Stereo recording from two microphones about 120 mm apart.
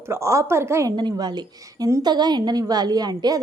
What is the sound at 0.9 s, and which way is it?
A woman's voice, 35° right (ahead or behind).